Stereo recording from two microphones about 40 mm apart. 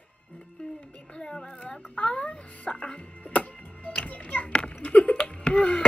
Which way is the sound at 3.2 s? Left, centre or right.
Left.